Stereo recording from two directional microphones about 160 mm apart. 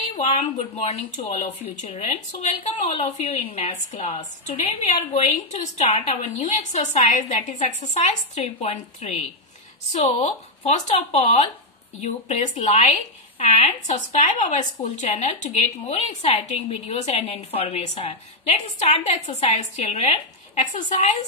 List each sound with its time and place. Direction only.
0.1 s a woman's voice: 45° left (ahead or behind)